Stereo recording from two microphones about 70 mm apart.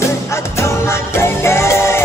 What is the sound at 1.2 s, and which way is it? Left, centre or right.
Music, left.